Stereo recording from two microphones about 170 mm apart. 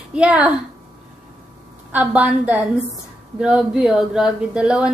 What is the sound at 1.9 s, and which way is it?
A woman's voice, 10° right (ahead or behind).